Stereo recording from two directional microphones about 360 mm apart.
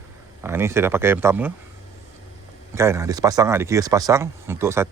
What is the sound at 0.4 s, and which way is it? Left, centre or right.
Speech, centre.